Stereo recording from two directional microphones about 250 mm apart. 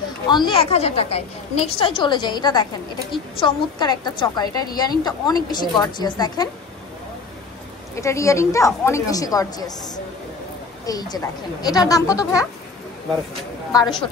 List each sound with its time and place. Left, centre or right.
0.3 s a woman's voice: centre
7.9 s a woman's voice: centre
10.9 s a woman's voice: centre
13.7 s a woman's voice: centre